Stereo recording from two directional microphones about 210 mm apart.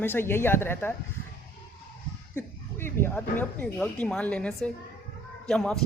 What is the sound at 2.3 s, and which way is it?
Speech, 10° left (ahead or behind).